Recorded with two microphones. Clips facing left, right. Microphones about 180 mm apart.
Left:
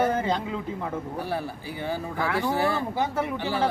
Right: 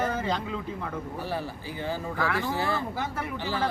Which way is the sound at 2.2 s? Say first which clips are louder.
Left 4 dB; 15° left (ahead or behind).